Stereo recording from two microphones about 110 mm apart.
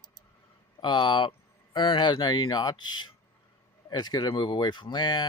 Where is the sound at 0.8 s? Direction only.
45° left (ahead or behind).